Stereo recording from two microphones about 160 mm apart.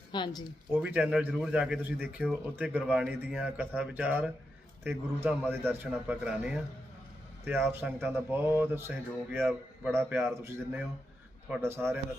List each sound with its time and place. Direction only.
0.1 s speech: 30° left (ahead or behind)
0.7 s a man's voice: 10° right (ahead or behind)
7.7 s a man's voice: 15° right (ahead or behind)